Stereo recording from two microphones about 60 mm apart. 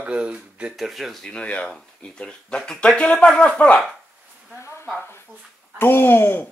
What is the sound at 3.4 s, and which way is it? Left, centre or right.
Speech, left.